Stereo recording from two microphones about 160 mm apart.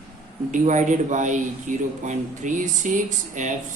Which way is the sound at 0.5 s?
50° right (ahead or behind).